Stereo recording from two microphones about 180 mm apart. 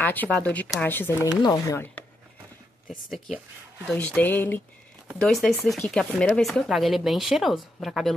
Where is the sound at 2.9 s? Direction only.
Centre (ahead or behind).